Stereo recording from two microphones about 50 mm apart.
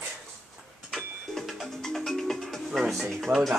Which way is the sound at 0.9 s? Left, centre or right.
Centre.